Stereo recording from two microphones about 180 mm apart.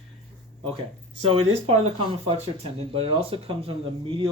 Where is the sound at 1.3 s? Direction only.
35° right (ahead or behind).